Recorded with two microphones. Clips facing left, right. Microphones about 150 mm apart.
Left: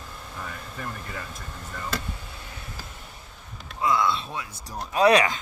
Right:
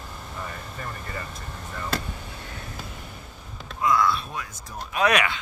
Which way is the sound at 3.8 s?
25° left (ahead or behind).